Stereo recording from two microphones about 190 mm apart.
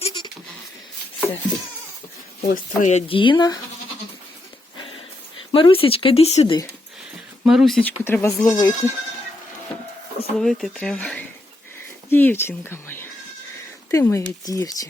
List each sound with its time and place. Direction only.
0.0 s a sound: 25° left (ahead or behind)
2.4 s speech: 40° left (ahead or behind); by 3.6 s 20° left (ahead or behind)
5.5 s speech: 25° left (ahead or behind)
7.4 s speech: centre (ahead or behind); by 8.9 s 15° left (ahead or behind)
10.3 s speech: centre (ahead or behind); by 14.8 s 20° left (ahead or behind)